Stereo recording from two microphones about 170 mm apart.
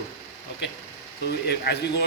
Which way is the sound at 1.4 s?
70° left (ahead or behind).